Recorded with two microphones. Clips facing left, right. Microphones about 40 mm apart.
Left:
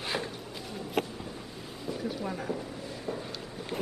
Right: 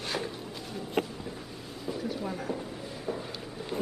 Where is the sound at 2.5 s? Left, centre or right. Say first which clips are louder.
Even; right.